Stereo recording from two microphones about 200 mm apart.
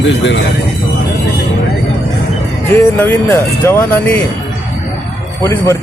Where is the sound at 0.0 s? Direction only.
65° left (ahead or behind).